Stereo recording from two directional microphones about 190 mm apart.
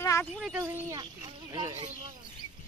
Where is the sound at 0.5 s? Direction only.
15° right (ahead or behind); by 2.1 s 30° right (ahead or behind).